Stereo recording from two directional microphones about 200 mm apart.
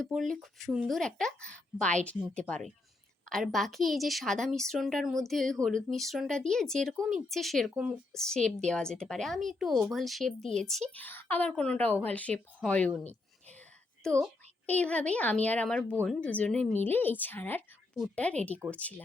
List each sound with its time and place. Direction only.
0.0 s speech: centre (ahead or behind)
14.0 s speech: 5° left (ahead or behind)